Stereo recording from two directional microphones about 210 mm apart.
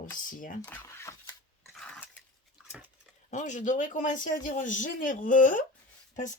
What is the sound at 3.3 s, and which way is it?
Speech, 35° left (ahead or behind).